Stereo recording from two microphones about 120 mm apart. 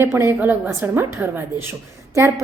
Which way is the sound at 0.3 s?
15° right (ahead or behind).